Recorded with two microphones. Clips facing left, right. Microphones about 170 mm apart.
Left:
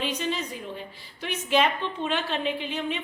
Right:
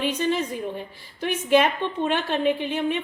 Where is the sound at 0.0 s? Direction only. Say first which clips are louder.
Right 5 dB; 50° right (ahead or behind).